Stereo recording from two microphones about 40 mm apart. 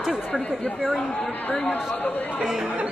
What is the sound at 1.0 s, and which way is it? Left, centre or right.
Speech, left.